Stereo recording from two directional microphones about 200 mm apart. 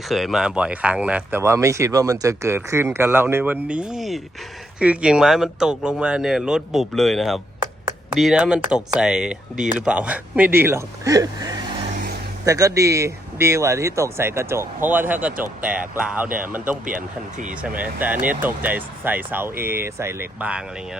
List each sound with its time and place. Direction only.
0.1 s a man's voice: centre (ahead or behind); by 11.6 s 20° right (ahead or behind)
11.9 s vehicle: 45° right (ahead or behind)
12.5 s a man's voice: 15° right (ahead or behind)
16.8 s speech: 40° right (ahead or behind)
18.3 s a man's voice: 10° right (ahead or behind)